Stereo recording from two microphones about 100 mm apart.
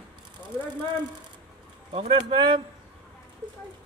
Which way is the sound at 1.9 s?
55° right (ahead or behind).